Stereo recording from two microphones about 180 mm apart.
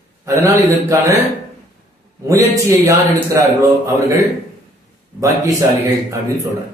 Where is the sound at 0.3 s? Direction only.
15° right (ahead or behind).